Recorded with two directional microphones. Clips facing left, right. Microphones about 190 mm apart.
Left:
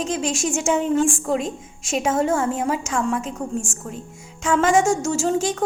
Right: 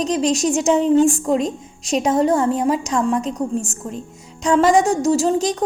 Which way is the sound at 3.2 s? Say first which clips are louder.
Right 5 dB; 15° right (ahead or behind).